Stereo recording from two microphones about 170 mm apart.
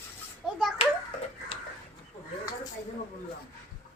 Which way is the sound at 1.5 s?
30° left (ahead or behind).